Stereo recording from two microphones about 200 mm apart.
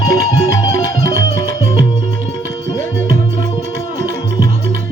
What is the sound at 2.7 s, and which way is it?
Music, 15° left (ahead or behind).